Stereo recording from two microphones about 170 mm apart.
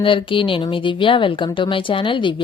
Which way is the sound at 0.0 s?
30° left (ahead or behind).